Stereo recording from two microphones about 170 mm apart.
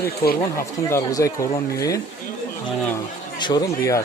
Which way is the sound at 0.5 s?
15° left (ahead or behind).